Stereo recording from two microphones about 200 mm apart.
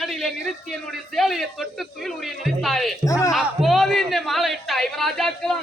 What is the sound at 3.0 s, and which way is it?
Speech, 15° left (ahead or behind).